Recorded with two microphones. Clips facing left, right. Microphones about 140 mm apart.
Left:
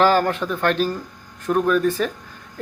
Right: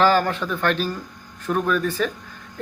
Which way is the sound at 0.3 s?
10° left (ahead or behind).